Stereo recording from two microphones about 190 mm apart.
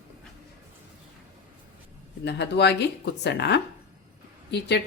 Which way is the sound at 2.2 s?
65° left (ahead or behind).